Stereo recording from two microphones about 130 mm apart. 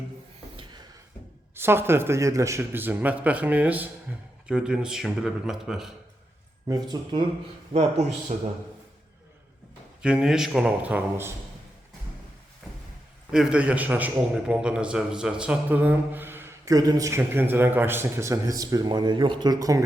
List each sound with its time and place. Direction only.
0.5 s a sound: 40° right (ahead or behind)
1.5 s a man's voice: 20° right (ahead or behind)
6.7 s speech: 30° right (ahead or behind)
7.7 s a man's voice: 60° right (ahead or behind)
10.0 s a man's voice: 5° right (ahead or behind)
13.3 s a man's voice: 5° right (ahead or behind); by 19.8 s 25° right (ahead or behind)